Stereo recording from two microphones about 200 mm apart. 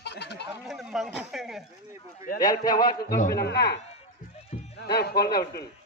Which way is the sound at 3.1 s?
50° left (ahead or behind).